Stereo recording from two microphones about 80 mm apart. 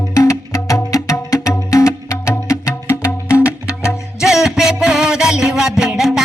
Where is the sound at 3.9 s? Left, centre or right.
Centre.